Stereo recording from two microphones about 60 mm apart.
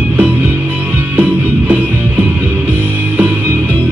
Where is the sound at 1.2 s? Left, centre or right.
Right.